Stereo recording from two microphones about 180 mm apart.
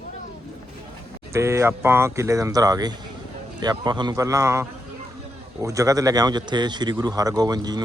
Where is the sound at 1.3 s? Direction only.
15° right (ahead or behind).